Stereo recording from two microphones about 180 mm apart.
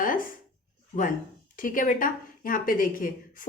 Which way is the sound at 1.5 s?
50° left (ahead or behind).